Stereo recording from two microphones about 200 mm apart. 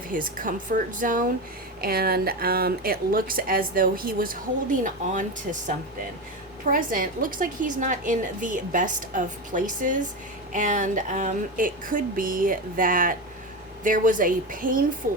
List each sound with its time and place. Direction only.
0.1 s a woman's voice: 45° right (ahead or behind)